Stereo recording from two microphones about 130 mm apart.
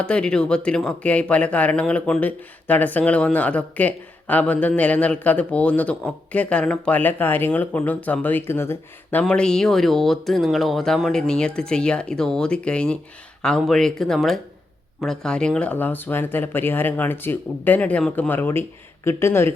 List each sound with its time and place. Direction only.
0.0 s speech: 5° left (ahead or behind)
9.2 s speech: 5° left (ahead or behind)